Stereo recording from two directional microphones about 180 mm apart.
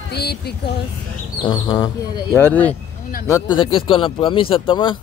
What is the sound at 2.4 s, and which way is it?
Speech, 10° left (ahead or behind).